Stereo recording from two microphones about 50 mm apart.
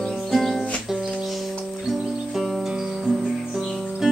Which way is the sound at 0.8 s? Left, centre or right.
Centre.